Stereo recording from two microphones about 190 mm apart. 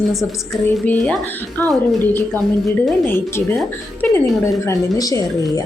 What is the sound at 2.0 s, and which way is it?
A woman's voice, 10° left (ahead or behind).